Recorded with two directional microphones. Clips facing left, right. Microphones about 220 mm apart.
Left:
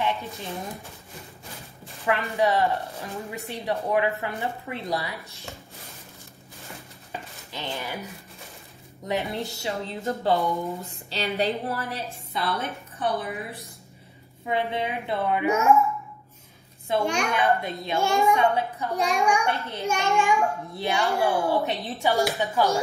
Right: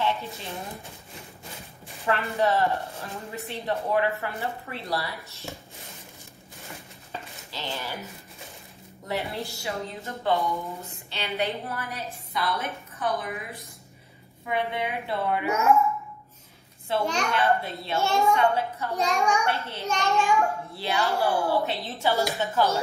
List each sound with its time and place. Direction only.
0.0 s a sound: 15° left (ahead or behind)
2.0 s a child's voice: 15° left (ahead or behind)
7.1 s dishes: 15° left (ahead or behind)
9.0 s a child's voice: 15° left (ahead or behind)
10.0 s a woman's voice: 30° left (ahead or behind); by 15.7 s 15° left (ahead or behind)
16.9 s a child's voice: 10° left (ahead or behind)